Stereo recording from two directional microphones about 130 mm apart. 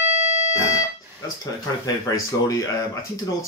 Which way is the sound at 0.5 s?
25° left (ahead or behind).